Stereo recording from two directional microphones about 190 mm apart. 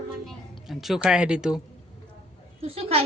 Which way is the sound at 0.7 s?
Centre (ahead or behind).